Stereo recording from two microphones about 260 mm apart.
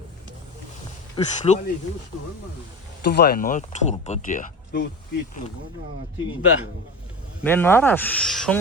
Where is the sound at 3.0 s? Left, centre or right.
Left.